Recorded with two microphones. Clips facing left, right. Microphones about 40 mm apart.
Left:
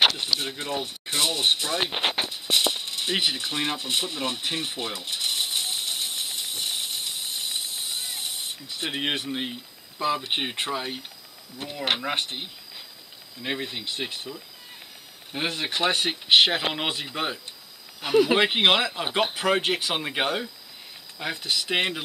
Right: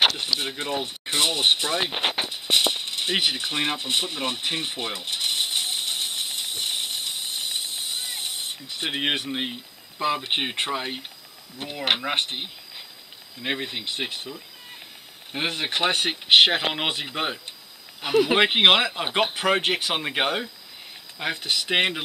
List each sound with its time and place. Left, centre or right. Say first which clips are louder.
0.4 s speech: right 2 dB; centre
2.0 s a sound: even; centre
2.3 s rattle: right 2 dB; centre
9.3 s speech: right 1 dB; centre
15.3 s speech: right 1 dB; centre